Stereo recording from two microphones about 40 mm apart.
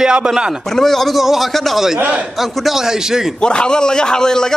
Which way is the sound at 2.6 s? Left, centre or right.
Centre.